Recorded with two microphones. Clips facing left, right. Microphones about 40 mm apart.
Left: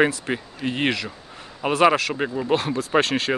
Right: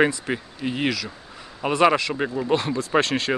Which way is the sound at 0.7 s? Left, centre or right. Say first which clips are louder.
Left 2 dB; left.